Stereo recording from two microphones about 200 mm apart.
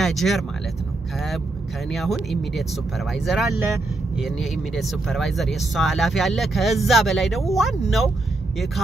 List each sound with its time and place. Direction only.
0.0 s speech: centre (ahead or behind)
1.9 s speech: centre (ahead or behind)